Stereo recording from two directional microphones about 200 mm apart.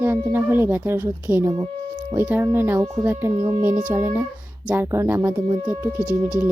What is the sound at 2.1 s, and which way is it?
Speech, 10° right (ahead or behind).